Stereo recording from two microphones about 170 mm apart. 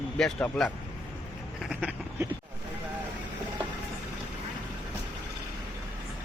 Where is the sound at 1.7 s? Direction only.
5° right (ahead or behind).